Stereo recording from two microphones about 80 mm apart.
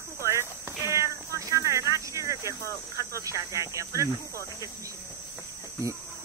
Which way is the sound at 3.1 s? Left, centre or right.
Right.